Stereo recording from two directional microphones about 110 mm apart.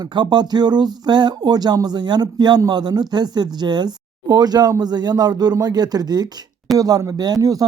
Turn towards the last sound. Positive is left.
turn(degrees=-35)  # may be behind; listen again after turning